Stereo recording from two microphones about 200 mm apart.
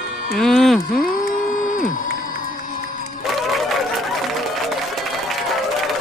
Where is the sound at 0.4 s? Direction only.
Centre (ahead or behind).